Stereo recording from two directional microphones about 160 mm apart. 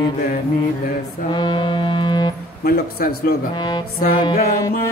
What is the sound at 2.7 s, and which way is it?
Speech, 70° left (ahead or behind).